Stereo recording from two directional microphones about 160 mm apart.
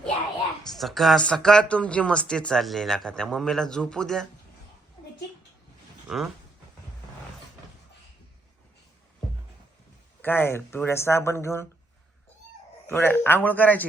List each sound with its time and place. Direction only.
0.7 s speech: centre (ahead or behind)
6.1 s speech: 5° right (ahead or behind)
10.2 s speech: 15° left (ahead or behind)
12.9 s speech: 15° left (ahead or behind)